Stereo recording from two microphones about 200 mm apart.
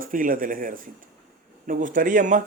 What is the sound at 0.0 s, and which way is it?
Speech, 45° right (ahead or behind).